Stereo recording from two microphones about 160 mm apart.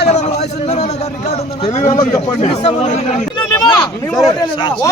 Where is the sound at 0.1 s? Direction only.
45° left (ahead or behind).